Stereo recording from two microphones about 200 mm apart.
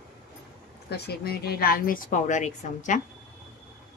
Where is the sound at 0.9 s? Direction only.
55° left (ahead or behind).